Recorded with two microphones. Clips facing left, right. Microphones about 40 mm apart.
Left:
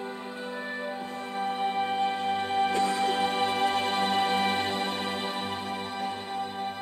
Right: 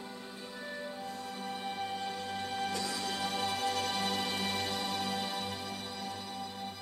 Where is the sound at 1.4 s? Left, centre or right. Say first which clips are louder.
Left 12 dB; left.